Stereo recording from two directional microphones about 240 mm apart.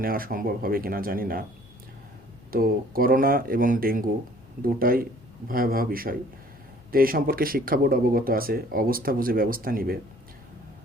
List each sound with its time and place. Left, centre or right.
0.0 s speech: right
2.5 s speech: right